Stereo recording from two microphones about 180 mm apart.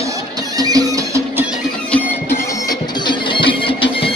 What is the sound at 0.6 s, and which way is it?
Music, 20° right (ahead or behind).